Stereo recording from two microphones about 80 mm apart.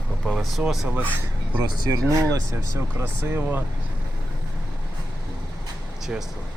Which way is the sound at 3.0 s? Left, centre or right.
Right.